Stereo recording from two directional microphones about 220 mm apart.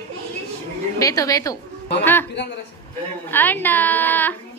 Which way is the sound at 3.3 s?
10° left (ahead or behind).